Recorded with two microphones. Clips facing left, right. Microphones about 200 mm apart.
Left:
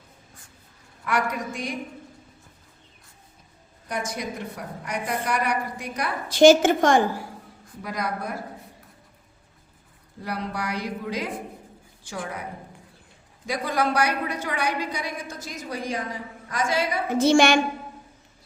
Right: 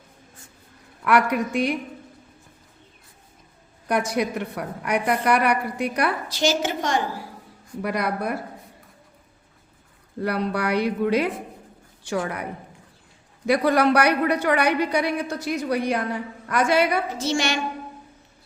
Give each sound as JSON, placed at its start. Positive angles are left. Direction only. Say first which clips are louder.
{"t": 1.0, "sound": "a woman's voice", "louder": "right 6 dB", "side_deg": -65}
{"t": 3.8, "sound": "a woman's voice", "louder": "right 7 dB", "side_deg": -65}
{"t": 6.2, "sound": "a woman's voice", "louder": "left 9 dB", "side_deg": 50}
{"t": 7.8, "sound": "a woman's voice", "louder": "right 5 dB", "side_deg": -65}
{"t": 10.2, "sound": "a woman's voice", "louder": "right 6 dB", "side_deg": -65}
{"t": 13.5, "sound": "a woman's voice", "louder": "right 7 dB", "side_deg": -65}
{"t": 17.1, "sound": "a woman's voice", "louder": "left 7 dB", "side_deg": 55}